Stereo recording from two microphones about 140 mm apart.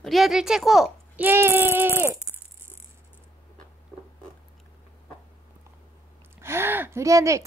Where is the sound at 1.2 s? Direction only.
15° right (ahead or behind).